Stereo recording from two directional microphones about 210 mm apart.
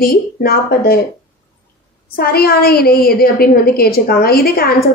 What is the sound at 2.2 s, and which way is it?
A woman's voice, 45° left (ahead or behind).